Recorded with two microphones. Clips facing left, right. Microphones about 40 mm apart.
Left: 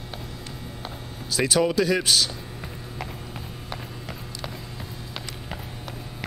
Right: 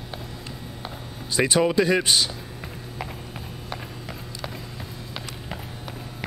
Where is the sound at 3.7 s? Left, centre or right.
Centre.